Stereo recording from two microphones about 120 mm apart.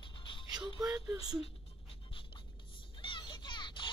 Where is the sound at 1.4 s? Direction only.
50° left (ahead or behind).